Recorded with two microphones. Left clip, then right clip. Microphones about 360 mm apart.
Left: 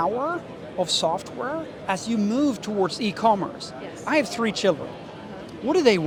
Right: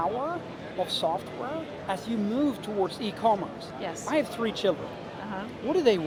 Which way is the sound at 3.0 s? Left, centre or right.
Left.